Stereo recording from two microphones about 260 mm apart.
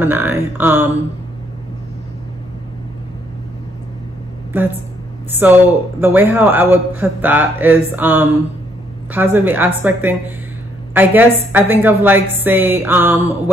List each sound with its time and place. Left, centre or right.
0.0 s a man's voice: centre
5.4 s a man's voice: centre